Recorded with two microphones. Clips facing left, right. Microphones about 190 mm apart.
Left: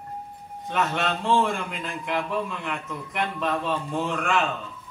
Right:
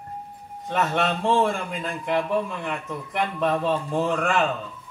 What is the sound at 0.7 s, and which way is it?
A man's voice, 40° right (ahead or behind).